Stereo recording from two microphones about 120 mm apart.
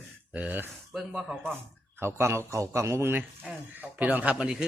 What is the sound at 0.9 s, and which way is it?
Speech, centre (ahead or behind).